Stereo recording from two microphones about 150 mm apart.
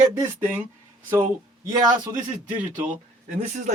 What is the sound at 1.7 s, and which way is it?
Speech, 25° right (ahead or behind).